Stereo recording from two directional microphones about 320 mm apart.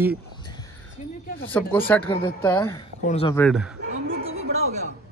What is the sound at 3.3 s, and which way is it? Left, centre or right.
Speech, centre.